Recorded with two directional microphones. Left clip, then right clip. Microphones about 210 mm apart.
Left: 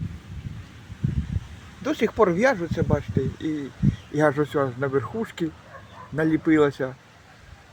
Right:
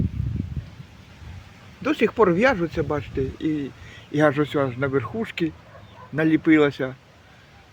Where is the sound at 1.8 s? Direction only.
20° right (ahead or behind).